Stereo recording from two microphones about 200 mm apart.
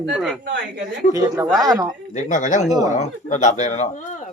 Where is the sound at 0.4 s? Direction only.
60° right (ahead or behind).